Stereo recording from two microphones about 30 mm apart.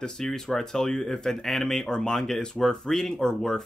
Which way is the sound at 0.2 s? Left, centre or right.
Centre.